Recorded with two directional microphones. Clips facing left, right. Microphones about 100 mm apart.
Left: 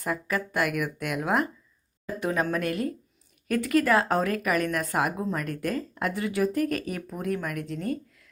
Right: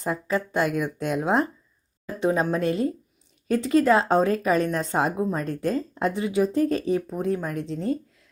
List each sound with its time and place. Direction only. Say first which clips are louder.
0.0 s speech: right 3 dB; 25° right (ahead or behind)